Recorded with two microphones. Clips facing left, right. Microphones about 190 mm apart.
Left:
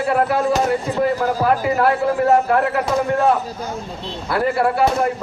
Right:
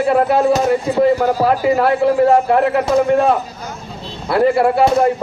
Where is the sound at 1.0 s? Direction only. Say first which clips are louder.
Right 6 dB; 25° right (ahead or behind).